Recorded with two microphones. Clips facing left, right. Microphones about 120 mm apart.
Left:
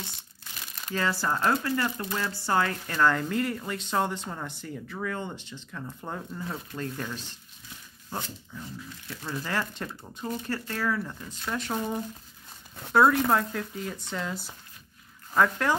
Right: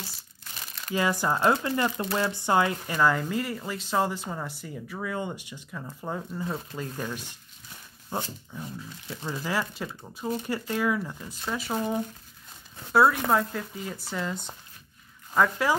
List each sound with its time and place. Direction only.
0.9 s speech: 15° right (ahead or behind)
9.4 s speech: 5° right (ahead or behind)